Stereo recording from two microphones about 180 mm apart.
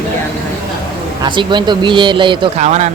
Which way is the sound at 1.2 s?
25° right (ahead or behind).